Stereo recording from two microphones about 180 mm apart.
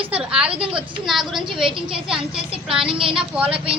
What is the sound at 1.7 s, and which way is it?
Speech, 30° right (ahead or behind).